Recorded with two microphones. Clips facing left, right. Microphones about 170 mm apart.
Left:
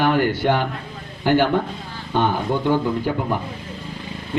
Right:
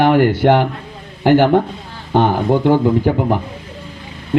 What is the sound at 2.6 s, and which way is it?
Speech, 60° right (ahead or behind).